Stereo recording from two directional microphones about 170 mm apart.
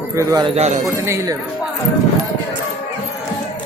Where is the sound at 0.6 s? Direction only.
45° right (ahead or behind).